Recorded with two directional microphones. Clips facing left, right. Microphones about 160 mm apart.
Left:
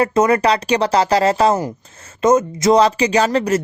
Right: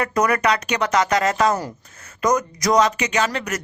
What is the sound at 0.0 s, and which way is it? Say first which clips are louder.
Speech: left 5 dB; 25° left (ahead or behind).